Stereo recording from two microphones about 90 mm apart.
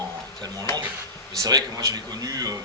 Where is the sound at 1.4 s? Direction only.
45° right (ahead or behind).